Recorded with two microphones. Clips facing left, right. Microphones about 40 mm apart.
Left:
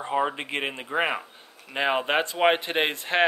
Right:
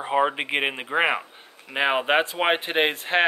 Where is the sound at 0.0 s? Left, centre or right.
Right.